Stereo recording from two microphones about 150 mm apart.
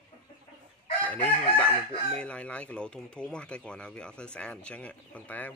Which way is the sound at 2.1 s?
10° left (ahead or behind).